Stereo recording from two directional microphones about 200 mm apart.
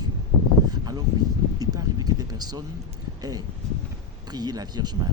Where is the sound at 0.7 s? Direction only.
20° right (ahead or behind).